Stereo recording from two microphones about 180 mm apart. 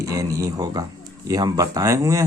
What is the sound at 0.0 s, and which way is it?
Speech, 20° right (ahead or behind).